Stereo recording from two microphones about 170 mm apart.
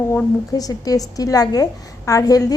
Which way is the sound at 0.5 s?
20° left (ahead or behind).